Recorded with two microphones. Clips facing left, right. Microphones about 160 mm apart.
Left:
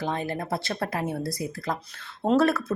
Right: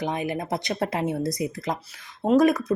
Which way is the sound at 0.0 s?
15° right (ahead or behind).